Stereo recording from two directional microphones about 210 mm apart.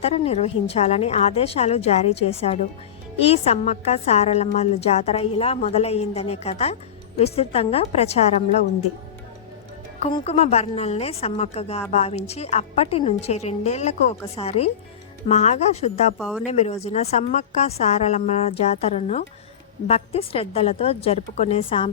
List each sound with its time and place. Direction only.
0.0 s a woman's voice: 30° left (ahead or behind)
10.0 s a woman's voice: 25° left (ahead or behind)
16.1 s speech: centre (ahead or behind)
16.5 s a woman's voice: 30° left (ahead or behind)